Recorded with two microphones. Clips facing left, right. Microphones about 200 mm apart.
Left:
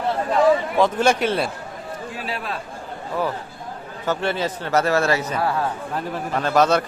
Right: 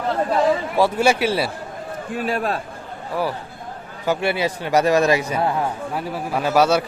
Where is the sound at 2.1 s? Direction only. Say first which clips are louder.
Right 9 dB; 45° right (ahead or behind).